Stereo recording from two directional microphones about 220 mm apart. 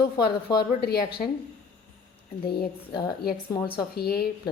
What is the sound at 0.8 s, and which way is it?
Speech, 45° left (ahead or behind).